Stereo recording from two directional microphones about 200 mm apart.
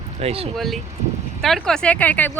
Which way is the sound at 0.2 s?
30° right (ahead or behind).